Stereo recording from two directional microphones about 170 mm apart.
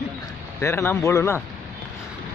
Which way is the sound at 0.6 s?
15° left (ahead or behind).